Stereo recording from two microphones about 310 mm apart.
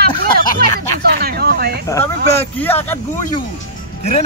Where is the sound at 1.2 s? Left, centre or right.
Right.